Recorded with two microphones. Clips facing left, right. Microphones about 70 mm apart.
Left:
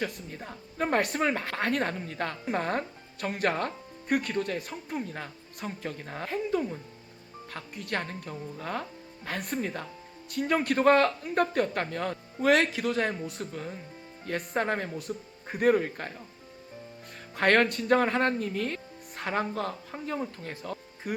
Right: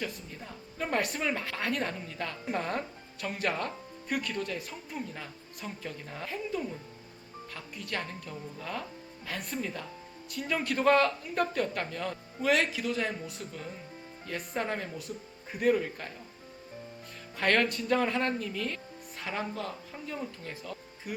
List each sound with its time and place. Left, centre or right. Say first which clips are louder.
0.0 s speech: left 4 dB; left
17.3 s speech: left 4 dB; left